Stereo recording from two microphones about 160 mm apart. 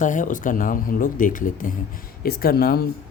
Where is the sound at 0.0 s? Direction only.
55° left (ahead or behind).